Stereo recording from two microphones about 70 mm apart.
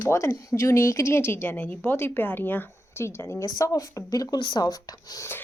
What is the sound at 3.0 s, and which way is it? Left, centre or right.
Speech, left.